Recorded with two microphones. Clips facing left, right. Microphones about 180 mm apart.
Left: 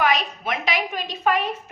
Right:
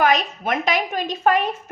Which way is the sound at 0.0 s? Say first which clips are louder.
Right 3 dB; 45° right (ahead or behind).